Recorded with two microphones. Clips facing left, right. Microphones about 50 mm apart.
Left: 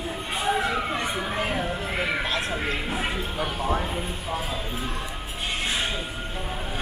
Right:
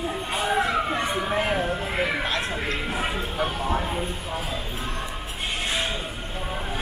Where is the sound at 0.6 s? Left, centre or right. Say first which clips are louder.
Right 2 dB; right.